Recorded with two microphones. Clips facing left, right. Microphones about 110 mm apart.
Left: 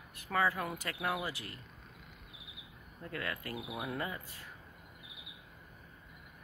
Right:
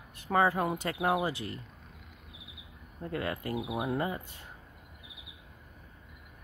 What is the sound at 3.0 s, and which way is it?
Speech, 30° right (ahead or behind).